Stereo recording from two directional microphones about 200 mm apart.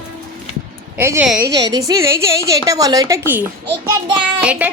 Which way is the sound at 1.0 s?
10° right (ahead or behind).